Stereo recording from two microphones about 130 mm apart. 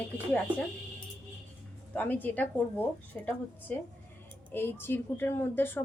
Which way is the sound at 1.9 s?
15° left (ahead or behind).